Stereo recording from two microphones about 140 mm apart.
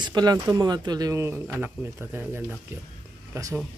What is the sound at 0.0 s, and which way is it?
Speech, 30° right (ahead or behind).